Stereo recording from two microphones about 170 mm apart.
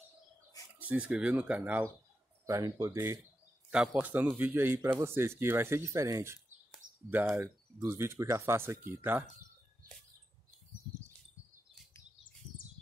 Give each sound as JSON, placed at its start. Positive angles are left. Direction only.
{"t": 0.7, "sound": "speech", "side_deg": -10}
{"t": 6.8, "sound": "a sound", "side_deg": -50}
{"t": 7.3, "sound": "speech", "side_deg": -15}